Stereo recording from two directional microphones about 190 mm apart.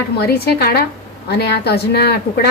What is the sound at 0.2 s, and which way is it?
A woman's voice, 55° left (ahead or behind).